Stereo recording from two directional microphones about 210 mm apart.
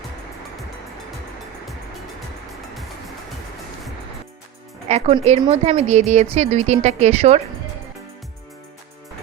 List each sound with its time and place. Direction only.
4.9 s a woman's voice: 30° right (ahead or behind)